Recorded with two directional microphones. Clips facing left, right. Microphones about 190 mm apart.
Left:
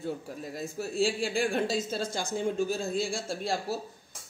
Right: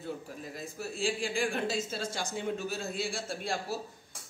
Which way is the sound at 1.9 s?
35° left (ahead or behind).